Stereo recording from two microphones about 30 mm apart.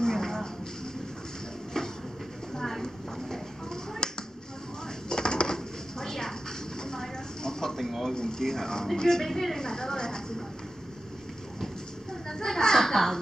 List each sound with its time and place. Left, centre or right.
0.0 s music: centre
2.8 s a sound: centre
4.0 s finger snapping: left
5.1 s dishes: left
5.9 s a sound: centre
8.1 s a woman's voice: left
9.2 s a woman's voice: centre
9.6 s a sound: centre
12.1 s children playing: centre